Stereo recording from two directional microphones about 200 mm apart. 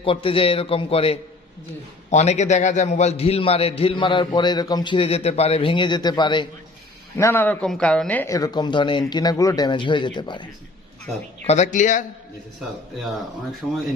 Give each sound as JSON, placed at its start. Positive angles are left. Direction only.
{"t": 0.0, "sound": "a man's voice", "side_deg": 25}
{"t": 7.2, "sound": "a man's voice", "side_deg": 10}
{"t": 11.4, "sound": "speech", "side_deg": 35}
{"t": 13.6, "sound": "speech", "side_deg": 0}